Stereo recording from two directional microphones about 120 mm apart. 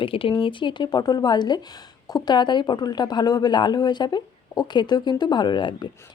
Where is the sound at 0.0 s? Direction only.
50° left (ahead or behind).